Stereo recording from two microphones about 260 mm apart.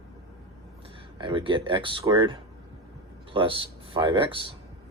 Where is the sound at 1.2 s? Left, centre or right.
Centre.